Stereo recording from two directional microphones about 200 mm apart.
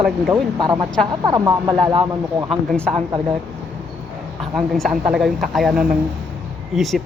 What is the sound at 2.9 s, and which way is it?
Speech, 25° right (ahead or behind).